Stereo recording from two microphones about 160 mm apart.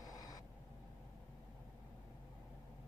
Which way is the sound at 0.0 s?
20° left (ahead or behind).